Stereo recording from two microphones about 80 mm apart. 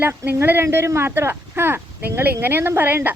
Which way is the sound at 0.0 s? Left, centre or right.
Right.